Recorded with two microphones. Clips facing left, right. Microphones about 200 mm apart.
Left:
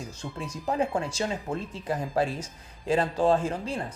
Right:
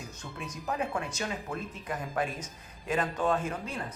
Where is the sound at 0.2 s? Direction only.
30° left (ahead or behind).